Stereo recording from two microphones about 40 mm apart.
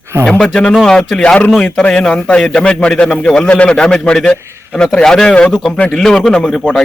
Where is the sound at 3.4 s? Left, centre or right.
Left.